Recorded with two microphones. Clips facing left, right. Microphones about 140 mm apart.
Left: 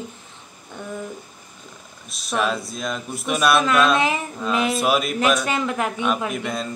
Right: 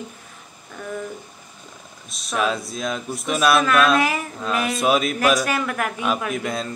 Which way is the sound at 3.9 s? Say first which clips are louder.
Right 1 dB; 20° left (ahead or behind).